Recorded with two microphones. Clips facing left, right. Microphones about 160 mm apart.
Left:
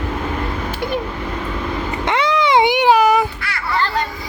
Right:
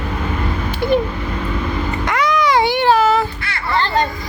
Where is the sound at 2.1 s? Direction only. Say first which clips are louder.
Left 1 dB; 25° left (ahead or behind).